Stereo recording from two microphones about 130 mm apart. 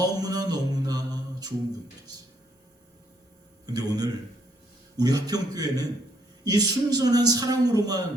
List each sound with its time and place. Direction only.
0.0 s mantra: 30° right (ahead or behind)
3.7 s a man's voice: 30° right (ahead or behind)